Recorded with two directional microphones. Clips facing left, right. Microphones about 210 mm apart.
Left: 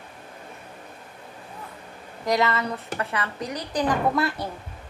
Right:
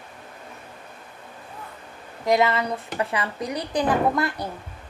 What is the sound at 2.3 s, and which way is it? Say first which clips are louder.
A woman's voice: right 3 dB; 15° right (ahead or behind).